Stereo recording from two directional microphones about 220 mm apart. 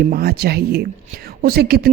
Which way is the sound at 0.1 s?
45° right (ahead or behind).